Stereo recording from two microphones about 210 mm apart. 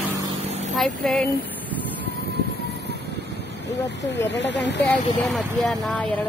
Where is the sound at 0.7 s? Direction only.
5° left (ahead or behind).